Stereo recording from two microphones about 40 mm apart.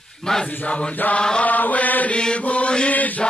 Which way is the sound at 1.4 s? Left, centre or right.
Left.